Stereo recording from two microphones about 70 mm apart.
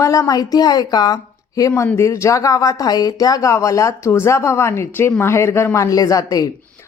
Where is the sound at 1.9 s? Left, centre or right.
Left.